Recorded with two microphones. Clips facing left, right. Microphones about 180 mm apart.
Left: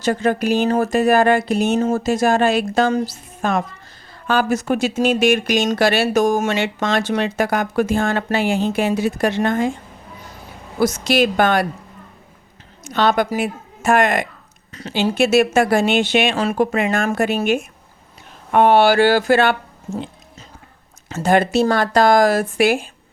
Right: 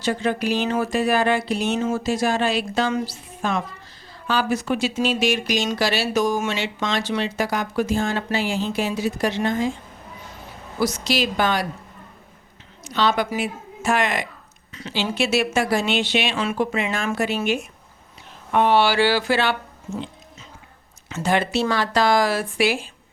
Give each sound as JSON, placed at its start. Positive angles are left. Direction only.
{"t": 0.0, "sound": "speech", "side_deg": 45}
{"t": 10.8, "sound": "a woman's voice", "side_deg": 50}
{"t": 12.8, "sound": "a woman's voice", "side_deg": 50}
{"t": 21.1, "sound": "speech", "side_deg": 45}